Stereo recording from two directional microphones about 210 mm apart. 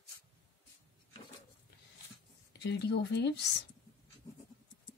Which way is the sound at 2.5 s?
55° left (ahead or behind).